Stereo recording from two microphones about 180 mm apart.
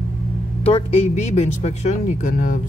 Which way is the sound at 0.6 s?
35° left (ahead or behind).